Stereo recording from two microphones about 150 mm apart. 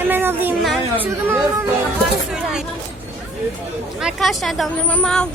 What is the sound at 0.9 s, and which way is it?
Speech, 10° right (ahead or behind).